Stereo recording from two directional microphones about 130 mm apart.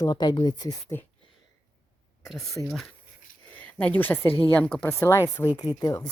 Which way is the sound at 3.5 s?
15° left (ahead or behind).